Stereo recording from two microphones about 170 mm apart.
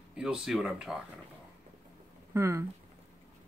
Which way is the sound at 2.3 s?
15° right (ahead or behind).